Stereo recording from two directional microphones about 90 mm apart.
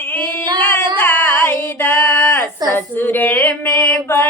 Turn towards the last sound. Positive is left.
turn(degrees=20)  # may be behind; listen again after turning